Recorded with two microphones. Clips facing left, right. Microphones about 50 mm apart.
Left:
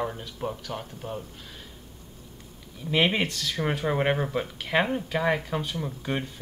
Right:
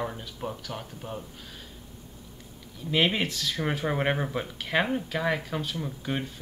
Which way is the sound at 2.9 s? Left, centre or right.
Centre.